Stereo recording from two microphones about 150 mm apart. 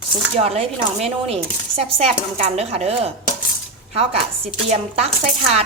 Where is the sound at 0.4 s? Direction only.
45° right (ahead or behind).